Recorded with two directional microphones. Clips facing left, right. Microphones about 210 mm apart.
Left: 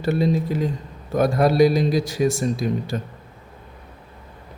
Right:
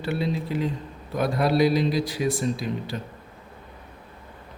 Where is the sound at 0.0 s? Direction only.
45° left (ahead or behind).